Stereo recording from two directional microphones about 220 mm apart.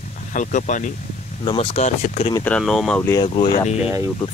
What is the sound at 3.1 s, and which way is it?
Speech, 25° left (ahead or behind).